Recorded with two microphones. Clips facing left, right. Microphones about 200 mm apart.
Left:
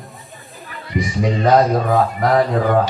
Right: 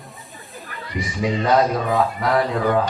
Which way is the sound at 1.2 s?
45° left (ahead or behind).